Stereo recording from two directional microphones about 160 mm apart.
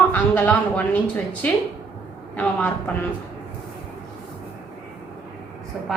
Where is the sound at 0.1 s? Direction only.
10° left (ahead or behind).